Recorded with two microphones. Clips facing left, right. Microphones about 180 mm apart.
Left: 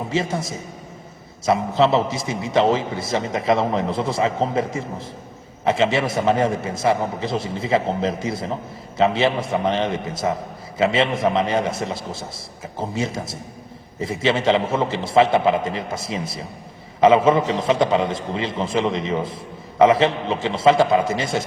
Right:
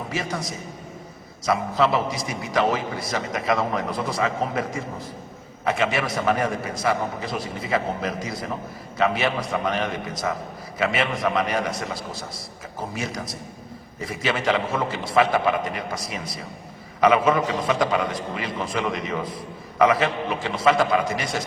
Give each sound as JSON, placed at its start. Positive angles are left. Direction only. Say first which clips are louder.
{"t": 0.1, "sound": "a man's voice", "louder": "left 6 dB", "side_deg": 25}